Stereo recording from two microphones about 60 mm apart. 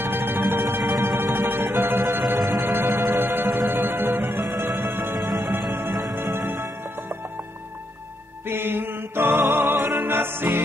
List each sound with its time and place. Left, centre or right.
0.0 s music: right
8.5 s music: right